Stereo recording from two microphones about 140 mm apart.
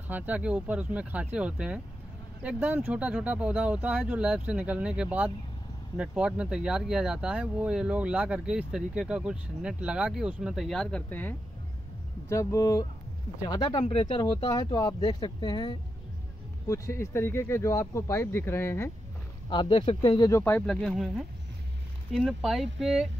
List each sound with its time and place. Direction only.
0.1 s speech: 10° right (ahead or behind); by 11.3 s 10° left (ahead or behind)
12.3 s speech: 25° left (ahead or behind)
16.6 s speech: 20° left (ahead or behind)
19.5 s speech: 35° left (ahead or behind)
20.2 s speech: 20° left (ahead or behind)
20.6 s speech: centre (ahead or behind)